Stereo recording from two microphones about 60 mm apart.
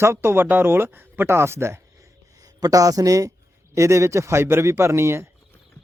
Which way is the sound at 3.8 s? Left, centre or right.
Right.